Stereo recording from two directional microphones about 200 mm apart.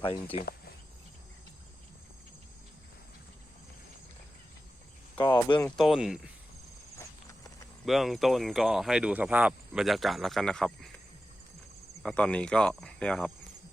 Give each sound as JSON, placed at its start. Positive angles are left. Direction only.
{"t": 0.0, "sound": "speech", "side_deg": 25}
{"t": 5.1, "sound": "speech", "side_deg": 20}
{"t": 5.5, "sound": "speech", "side_deg": 5}
{"t": 7.9, "sound": "speech", "side_deg": 0}
{"t": 12.0, "sound": "speech", "side_deg": 5}